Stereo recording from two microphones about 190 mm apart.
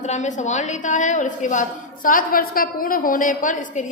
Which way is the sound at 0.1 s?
40° left (ahead or behind).